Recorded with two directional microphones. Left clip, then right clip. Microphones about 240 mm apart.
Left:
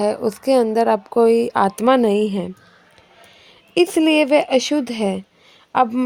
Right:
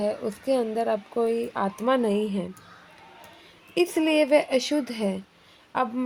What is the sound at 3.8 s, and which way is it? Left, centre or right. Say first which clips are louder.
Speech: left 7 dB; left.